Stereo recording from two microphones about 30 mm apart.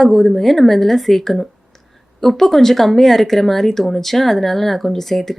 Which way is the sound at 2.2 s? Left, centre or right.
Centre.